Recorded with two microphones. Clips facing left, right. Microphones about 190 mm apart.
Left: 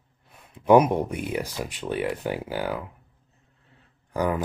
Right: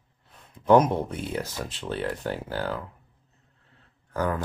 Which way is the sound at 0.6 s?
10° left (ahead or behind).